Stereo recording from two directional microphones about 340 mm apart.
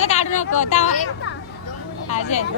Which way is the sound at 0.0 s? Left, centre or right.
Centre.